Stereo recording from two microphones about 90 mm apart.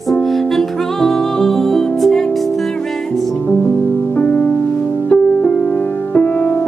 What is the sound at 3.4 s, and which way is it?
Music, 15° left (ahead or behind).